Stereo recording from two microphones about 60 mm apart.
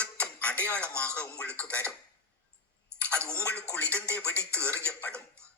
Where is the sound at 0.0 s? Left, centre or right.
Left.